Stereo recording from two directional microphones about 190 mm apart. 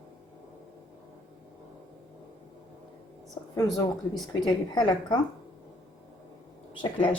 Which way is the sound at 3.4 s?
15° left (ahead or behind).